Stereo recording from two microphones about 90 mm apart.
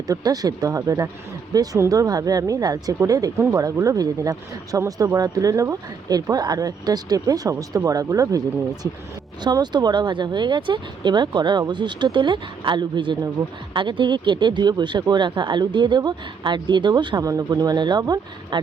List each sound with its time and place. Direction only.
0.1 s speech: 45° right (ahead or behind)
9.4 s speech: 50° right (ahead or behind)
17.2 s speech: 45° right (ahead or behind)
18.5 s speech: 60° right (ahead or behind)